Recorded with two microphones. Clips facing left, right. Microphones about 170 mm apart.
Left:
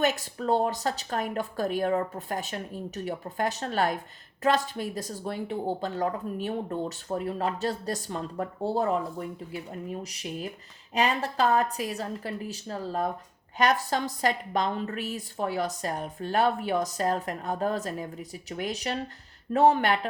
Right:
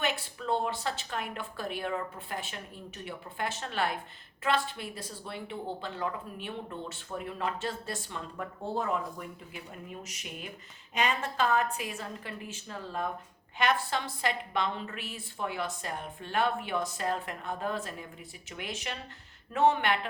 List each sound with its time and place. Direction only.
0.0 s speech: 40° left (ahead or behind)